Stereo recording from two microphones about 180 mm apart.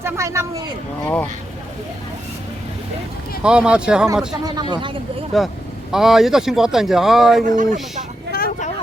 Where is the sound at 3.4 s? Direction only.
5° right (ahead or behind).